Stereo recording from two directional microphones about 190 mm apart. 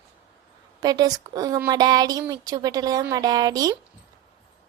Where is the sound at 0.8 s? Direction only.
20° right (ahead or behind).